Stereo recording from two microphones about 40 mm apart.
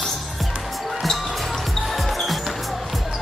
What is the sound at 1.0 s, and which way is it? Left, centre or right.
Music, centre.